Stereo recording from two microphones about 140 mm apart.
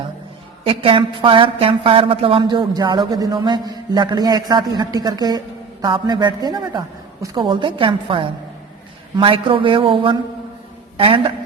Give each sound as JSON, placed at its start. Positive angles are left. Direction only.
{"t": 0.6, "sound": "a woman's voice", "side_deg": -40}